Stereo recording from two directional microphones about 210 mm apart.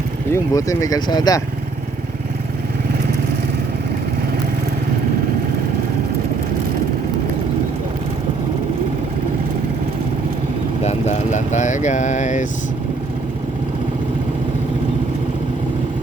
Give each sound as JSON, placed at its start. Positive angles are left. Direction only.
{"t": 0.3, "sound": "speech", "side_deg": 15}
{"t": 10.8, "sound": "speech", "side_deg": 30}